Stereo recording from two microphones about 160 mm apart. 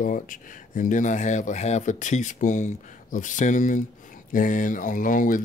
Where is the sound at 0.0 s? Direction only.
55° left (ahead or behind).